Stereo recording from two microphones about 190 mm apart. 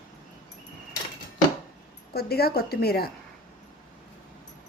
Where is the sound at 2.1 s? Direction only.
55° left (ahead or behind).